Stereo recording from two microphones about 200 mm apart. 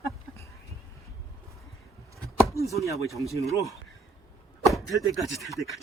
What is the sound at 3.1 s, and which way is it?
Speech, 15° left (ahead or behind).